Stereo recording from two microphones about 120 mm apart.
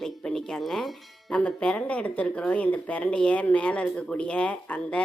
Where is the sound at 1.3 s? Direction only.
10° left (ahead or behind).